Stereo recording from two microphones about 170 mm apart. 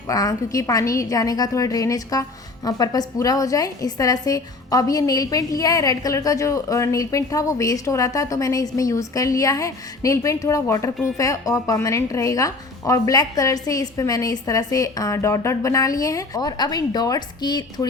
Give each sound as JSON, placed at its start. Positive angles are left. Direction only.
{"t": 0.1, "sound": "a woman's voice", "side_deg": 20}